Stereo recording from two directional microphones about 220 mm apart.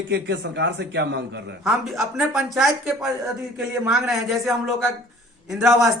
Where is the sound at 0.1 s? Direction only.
50° right (ahead or behind).